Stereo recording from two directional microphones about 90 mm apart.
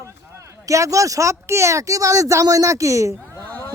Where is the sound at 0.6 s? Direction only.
40° right (ahead or behind).